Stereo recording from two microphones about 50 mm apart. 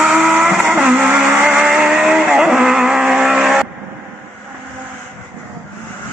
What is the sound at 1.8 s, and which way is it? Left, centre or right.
Vehicle, centre.